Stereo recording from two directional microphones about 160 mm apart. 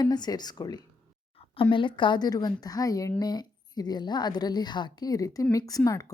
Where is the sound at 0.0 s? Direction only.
25° left (ahead or behind).